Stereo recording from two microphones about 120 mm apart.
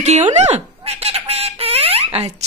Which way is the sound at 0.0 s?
70° right (ahead or behind).